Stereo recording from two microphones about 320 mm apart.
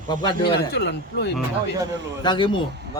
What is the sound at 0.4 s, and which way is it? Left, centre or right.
Speech, left.